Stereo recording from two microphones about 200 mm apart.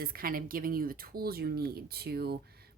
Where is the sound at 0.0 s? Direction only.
50° right (ahead or behind).